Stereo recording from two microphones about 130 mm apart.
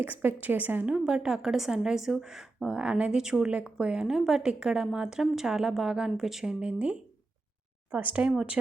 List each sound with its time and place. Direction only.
0.0 s a woman's voice: 15° right (ahead or behind)